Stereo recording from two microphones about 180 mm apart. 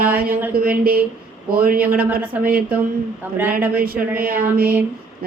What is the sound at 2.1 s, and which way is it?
A woman's voice, 10° right (ahead or behind).